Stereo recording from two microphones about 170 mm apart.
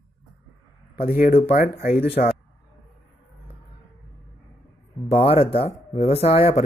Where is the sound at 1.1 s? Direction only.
60° left (ahead or behind).